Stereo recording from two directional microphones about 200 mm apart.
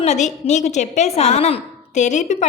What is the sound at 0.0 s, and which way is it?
A woman's voice, 35° left (ahead or behind).